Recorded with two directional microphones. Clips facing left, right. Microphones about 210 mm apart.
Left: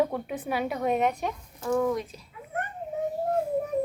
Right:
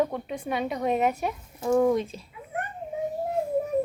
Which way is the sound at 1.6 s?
25° right (ahead or behind).